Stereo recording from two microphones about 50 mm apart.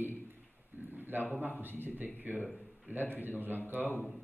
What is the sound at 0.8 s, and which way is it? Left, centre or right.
Speech, right.